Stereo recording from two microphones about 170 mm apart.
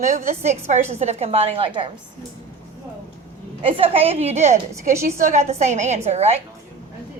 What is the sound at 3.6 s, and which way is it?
A woman's voice, 30° right (ahead or behind).